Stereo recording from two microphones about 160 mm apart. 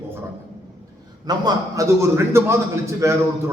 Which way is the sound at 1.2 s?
25° right (ahead or behind).